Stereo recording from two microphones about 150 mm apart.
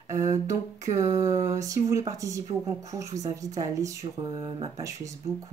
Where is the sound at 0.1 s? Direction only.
20° right (ahead or behind).